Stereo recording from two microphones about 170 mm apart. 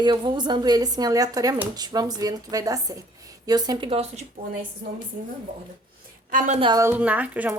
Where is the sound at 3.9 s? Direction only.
40° right (ahead or behind).